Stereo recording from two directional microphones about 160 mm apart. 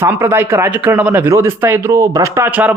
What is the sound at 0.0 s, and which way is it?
Speech, 15° right (ahead or behind).